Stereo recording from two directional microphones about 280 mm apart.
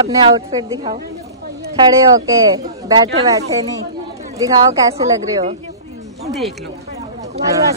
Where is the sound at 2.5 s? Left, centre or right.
Centre.